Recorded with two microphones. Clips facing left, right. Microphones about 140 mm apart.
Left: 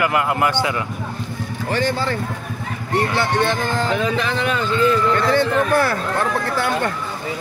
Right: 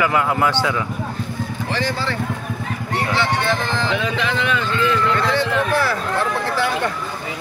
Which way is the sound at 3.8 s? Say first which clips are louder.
Left 2 dB; 40° left (ahead or behind).